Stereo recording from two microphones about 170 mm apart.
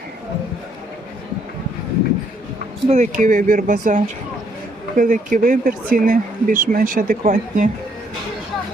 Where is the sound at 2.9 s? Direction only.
45° right (ahead or behind).